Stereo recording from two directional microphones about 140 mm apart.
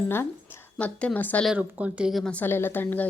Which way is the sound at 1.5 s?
10° right (ahead or behind).